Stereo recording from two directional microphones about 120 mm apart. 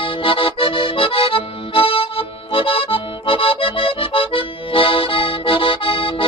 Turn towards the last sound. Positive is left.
turn(degrees=50)  # may be behind; listen again after turning